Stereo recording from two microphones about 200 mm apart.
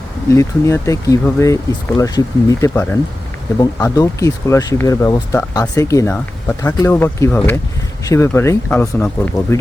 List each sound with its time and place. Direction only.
0.3 s speech: 15° left (ahead or behind)